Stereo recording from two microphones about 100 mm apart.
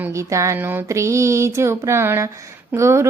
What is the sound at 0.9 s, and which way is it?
Speech, 30° right (ahead or behind).